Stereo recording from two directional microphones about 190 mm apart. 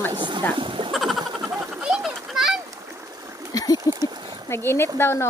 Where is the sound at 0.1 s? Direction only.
25° right (ahead or behind).